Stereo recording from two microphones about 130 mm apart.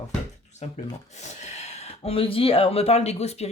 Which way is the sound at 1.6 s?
50° left (ahead or behind).